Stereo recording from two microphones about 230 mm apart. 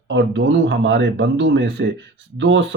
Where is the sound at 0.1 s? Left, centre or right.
Right.